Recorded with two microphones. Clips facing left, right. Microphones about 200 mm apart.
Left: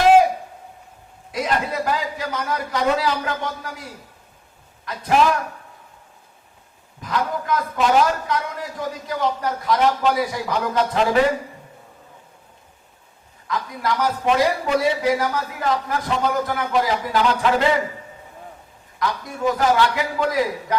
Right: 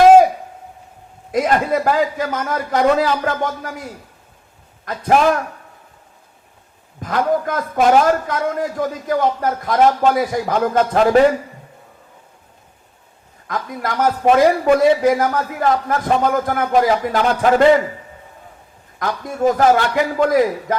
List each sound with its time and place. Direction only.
1.3 s a man's voice: 50° right (ahead or behind)
7.0 s a man's voice: 50° right (ahead or behind)
13.5 s a man's voice: 50° right (ahead or behind)
18.9 s a man's voice: 45° right (ahead or behind)